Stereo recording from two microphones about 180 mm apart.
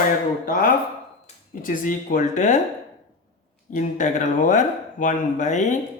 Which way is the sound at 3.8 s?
45° left (ahead or behind).